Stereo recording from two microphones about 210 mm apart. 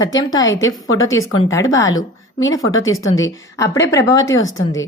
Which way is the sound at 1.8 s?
65° left (ahead or behind).